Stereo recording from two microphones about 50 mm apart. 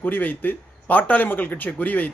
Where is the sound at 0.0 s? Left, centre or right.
Left.